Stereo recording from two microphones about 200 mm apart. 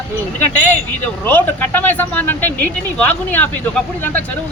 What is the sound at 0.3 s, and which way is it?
Speech, 10° left (ahead or behind).